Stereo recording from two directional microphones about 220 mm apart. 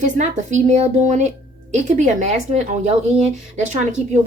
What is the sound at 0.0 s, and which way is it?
A woman's voice, 30° right (ahead or behind).